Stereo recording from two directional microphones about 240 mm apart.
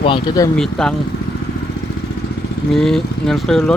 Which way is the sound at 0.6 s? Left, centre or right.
Centre.